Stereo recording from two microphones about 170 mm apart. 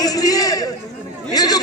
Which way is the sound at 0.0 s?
20° left (ahead or behind).